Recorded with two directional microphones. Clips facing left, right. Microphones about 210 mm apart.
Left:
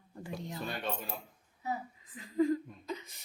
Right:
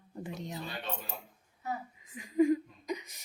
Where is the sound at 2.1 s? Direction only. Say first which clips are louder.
Right 3 dB; 15° right (ahead or behind).